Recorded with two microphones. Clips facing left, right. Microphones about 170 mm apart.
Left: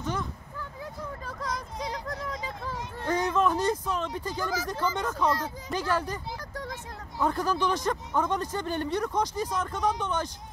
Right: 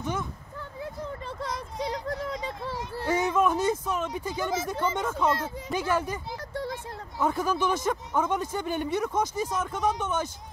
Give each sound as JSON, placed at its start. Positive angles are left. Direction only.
{"t": 0.0, "sound": "a sound", "side_deg": -10}
{"t": 1.9, "sound": "speech", "side_deg": -30}
{"t": 2.7, "sound": "speech", "side_deg": -5}
{"t": 6.5, "sound": "vehicle", "side_deg": -30}
{"t": 7.2, "sound": "speech", "side_deg": -5}